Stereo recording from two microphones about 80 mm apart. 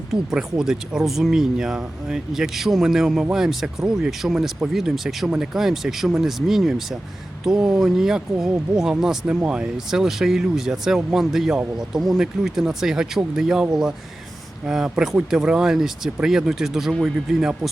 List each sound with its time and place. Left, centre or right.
0.1 s speech: centre